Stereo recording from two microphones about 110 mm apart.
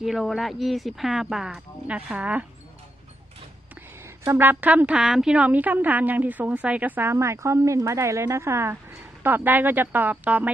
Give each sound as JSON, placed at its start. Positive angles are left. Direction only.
{"t": 0.0, "sound": "speech", "side_deg": 0}
{"t": 4.2, "sound": "a woman's voice", "side_deg": -20}